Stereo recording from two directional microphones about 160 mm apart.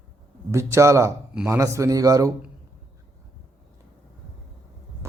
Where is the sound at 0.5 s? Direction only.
20° right (ahead or behind).